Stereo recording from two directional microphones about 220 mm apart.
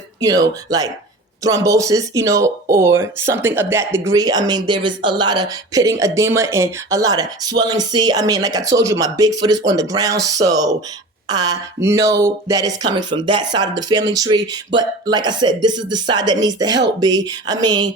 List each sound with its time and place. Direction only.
0.2 s speech: 15° right (ahead or behind)